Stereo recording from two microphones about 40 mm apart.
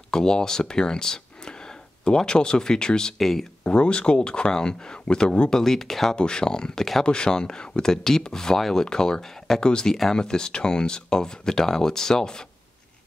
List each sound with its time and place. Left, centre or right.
0.1 s speech: centre
3.2 s speech: centre
3.6 s speech: left
5.5 s speech: centre
6.1 s speech: left
7.1 s speech: centre
8.8 s speech: centre